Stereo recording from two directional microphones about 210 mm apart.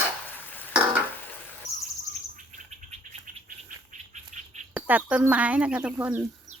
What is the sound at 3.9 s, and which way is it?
Bird, 35° right (ahead or behind).